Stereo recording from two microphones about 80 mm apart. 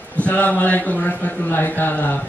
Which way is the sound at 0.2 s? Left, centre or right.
Centre.